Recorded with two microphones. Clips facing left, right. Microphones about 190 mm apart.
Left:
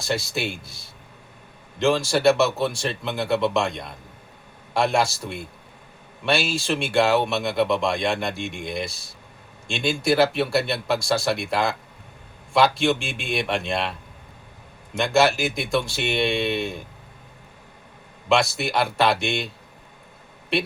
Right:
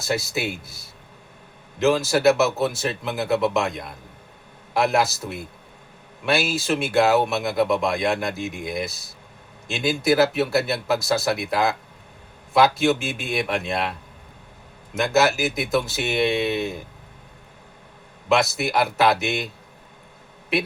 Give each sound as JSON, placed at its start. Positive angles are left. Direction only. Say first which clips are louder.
{"t": 0.0, "sound": "speech", "louder": "right 1 dB", "side_deg": -5}
{"t": 1.8, "sound": "speech", "louder": "right 1 dB", "side_deg": -5}
{"t": 14.9, "sound": "speech", "louder": "even", "side_deg": -5}
{"t": 18.3, "sound": "speech", "louder": "right 1 dB", "side_deg": -5}